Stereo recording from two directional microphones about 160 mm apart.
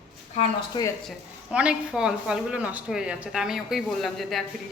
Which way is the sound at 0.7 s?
30° left (ahead or behind).